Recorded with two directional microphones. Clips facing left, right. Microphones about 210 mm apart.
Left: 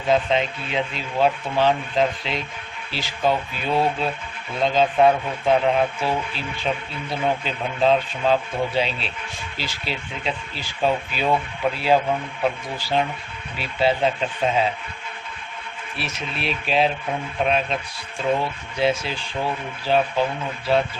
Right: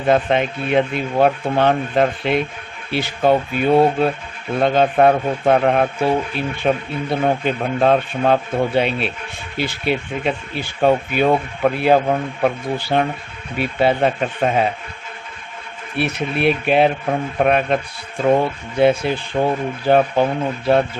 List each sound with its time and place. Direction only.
0.1 s a man's voice: 55° right (ahead or behind)
16.0 s a man's voice: 60° right (ahead or behind)